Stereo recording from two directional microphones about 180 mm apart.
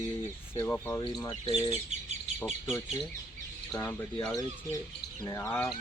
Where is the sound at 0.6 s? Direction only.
15° left (ahead or behind).